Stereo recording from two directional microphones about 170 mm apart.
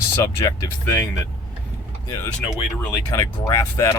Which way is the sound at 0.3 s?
20° left (ahead or behind).